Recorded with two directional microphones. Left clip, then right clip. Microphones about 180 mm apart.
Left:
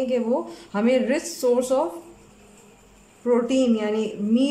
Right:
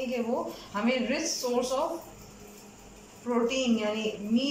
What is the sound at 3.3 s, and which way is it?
Speech, 50° left (ahead or behind).